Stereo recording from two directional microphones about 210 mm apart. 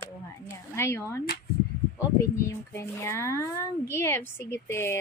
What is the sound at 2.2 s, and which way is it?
A child's voice, 15° left (ahead or behind).